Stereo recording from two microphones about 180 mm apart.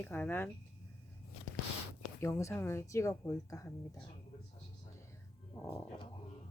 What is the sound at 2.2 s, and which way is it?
A woman's voice, 15° left (ahead or behind).